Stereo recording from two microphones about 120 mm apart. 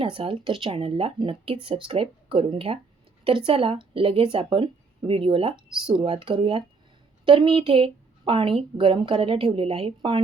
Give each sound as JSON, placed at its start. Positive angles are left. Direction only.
{"t": 0.0, "sound": "a woman's voice", "side_deg": -45}